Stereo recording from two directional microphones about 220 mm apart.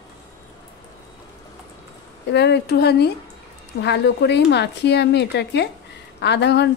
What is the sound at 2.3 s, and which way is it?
Speech, 50° left (ahead or behind).